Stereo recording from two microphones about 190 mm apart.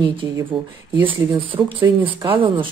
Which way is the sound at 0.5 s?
Centre (ahead or behind).